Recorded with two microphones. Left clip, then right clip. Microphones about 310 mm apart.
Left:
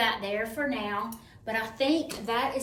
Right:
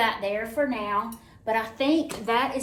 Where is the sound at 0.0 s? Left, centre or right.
Centre.